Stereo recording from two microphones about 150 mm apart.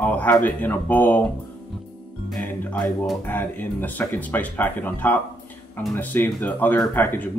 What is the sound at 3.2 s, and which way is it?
Speech, 10° left (ahead or behind).